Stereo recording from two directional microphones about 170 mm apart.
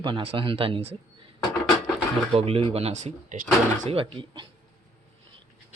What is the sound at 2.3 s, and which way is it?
Speech, 35° right (ahead or behind).